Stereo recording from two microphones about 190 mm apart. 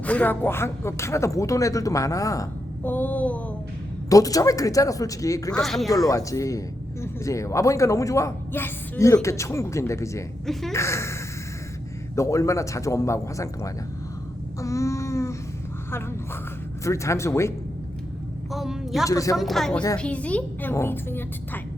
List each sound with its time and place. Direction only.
0.0 s speech: 10° left (ahead or behind)
4.1 s speech: 20° left (ahead or behind)
5.5 s speech: centre (ahead or behind)
5.9 s speech: 20° left (ahead or behind)
10.4 s speech: centre (ahead or behind)
10.7 s speech: 15° left (ahead or behind)
14.6 s a sound: 15° left (ahead or behind)
16.8 s speech: 15° left (ahead or behind)
18.5 s a sound: centre (ahead or behind)
19.0 s speech: 15° left (ahead or behind)
19.4 s speech: centre (ahead or behind)